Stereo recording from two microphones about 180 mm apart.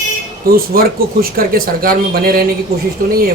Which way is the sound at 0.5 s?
55° right (ahead or behind).